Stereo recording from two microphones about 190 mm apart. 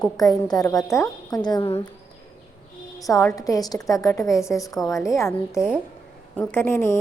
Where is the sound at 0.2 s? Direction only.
20° left (ahead or behind).